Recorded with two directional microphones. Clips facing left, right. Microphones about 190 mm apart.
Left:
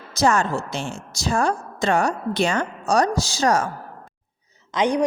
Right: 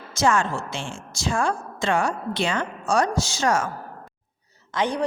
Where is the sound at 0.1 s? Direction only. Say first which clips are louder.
Left 2 dB; 40° left (ahead or behind).